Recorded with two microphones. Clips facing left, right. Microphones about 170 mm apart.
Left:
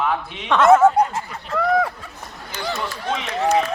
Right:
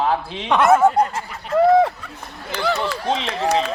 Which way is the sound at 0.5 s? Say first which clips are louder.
Left 1 dB; 15° right (ahead or behind).